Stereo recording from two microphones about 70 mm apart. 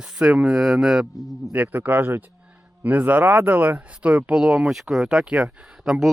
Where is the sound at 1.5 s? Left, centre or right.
Right.